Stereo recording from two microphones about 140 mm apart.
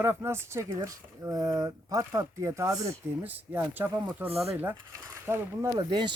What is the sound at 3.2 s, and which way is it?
Speech, 15° right (ahead or behind).